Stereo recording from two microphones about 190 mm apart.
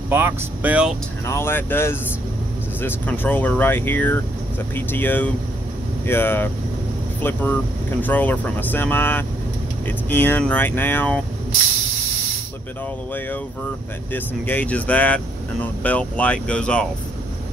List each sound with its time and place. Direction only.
0.1 s speech: 10° right (ahead or behind)
1.2 s speech: 15° left (ahead or behind)
14.1 s speech: 10° left (ahead or behind)